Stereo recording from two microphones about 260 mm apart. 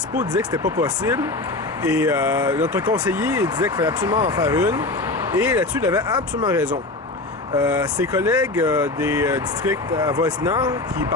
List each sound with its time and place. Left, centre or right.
0.8 s speech: centre
6.1 s speech: centre
7.7 s speech: centre